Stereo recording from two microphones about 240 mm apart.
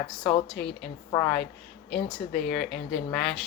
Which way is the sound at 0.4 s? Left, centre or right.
Centre.